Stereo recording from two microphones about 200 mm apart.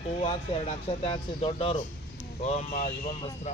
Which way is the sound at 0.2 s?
30° left (ahead or behind).